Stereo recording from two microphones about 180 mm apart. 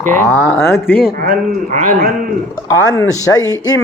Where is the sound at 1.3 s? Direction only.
45° right (ahead or behind).